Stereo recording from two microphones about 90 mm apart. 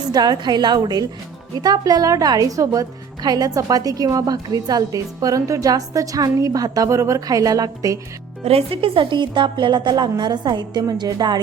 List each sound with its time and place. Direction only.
0.1 s a woman's voice: 50° right (ahead or behind)
8.5 s a woman's voice: 90° right; by 11.3 s 55° right (ahead or behind)